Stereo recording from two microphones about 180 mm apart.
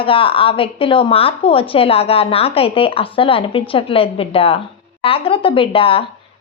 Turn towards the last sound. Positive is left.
turn(degrees=30)  # may be behind; listen again after turning